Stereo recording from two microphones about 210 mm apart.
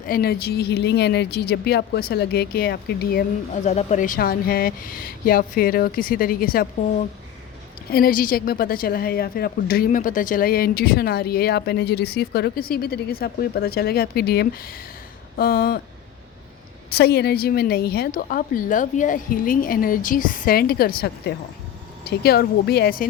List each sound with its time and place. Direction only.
0.1 s a woman's voice: 50° left (ahead or behind)
16.9 s a woman's voice: 50° left (ahead or behind)